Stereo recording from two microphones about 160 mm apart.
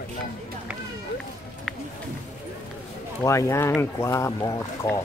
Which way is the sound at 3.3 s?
20° left (ahead or behind).